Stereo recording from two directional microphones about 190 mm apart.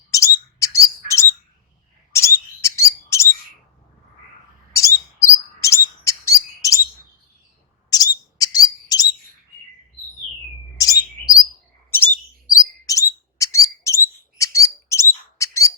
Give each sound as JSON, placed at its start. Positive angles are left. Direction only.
{"t": 0.6, "sound": "bird", "side_deg": 15}
{"t": 4.7, "sound": "a sound", "side_deg": 15}
{"t": 5.5, "sound": "bird", "side_deg": 15}
{"t": 7.9, "sound": "bird", "side_deg": 20}
{"t": 10.8, "sound": "chirp", "side_deg": 20}
{"t": 11.9, "sound": "bird", "side_deg": 10}